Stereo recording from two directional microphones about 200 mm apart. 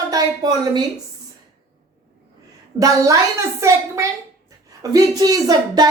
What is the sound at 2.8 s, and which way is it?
Speech, 15° right (ahead or behind).